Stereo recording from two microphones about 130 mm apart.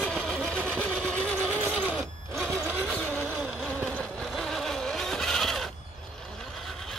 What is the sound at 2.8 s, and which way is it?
Vehicle, 5° left (ahead or behind).